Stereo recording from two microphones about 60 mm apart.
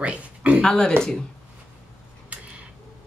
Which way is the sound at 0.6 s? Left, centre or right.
Centre.